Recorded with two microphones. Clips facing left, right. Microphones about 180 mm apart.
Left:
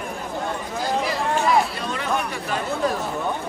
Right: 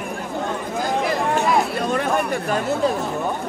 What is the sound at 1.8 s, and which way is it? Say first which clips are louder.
Speech: right 5 dB; 50° right (ahead or behind).